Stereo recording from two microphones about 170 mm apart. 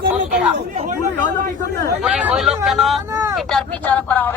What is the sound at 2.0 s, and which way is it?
Speech, 5° right (ahead or behind).